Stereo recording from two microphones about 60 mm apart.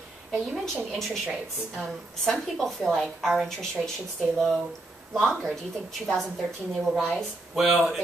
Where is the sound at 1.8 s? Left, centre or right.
Centre.